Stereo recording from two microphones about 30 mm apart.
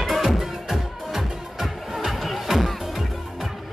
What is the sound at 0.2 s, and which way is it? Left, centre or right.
Music, centre.